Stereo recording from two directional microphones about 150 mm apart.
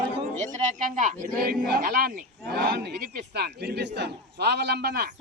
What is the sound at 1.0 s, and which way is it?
A man's voice, 65° right (ahead or behind).